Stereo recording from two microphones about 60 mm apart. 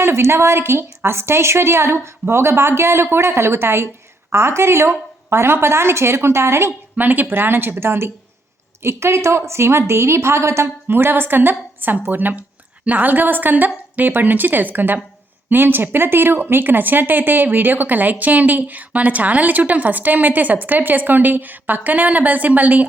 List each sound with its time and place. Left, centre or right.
0.0 s a woman's voice: right
6.9 s a woman's voice: right
10.8 s a woman's voice: right